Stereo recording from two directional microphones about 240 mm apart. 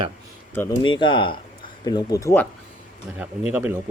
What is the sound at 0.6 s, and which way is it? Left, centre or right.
Speech, centre.